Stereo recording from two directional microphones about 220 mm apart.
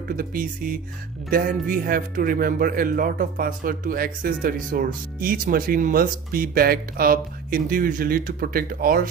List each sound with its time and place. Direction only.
0.1 s speech: 40° right (ahead or behind)